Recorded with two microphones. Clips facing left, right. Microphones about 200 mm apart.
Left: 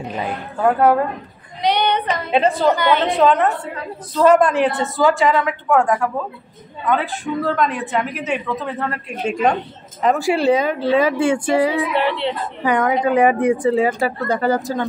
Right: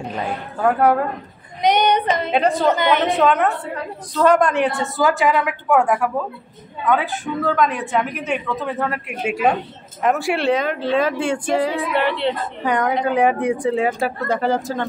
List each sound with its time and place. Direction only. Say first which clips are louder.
0.2 s speech: left 1 dB; 5° left (ahead or behind)
1.6 s child singing: right 2 dB; 20° right (ahead or behind)
2.3 s speech: left 2 dB; centre (ahead or behind)
2.7 s a woman's voice: left 1 dB; 20° right (ahead or behind)
3.1 s a woman's voice: left 1 dB; centre (ahead or behind)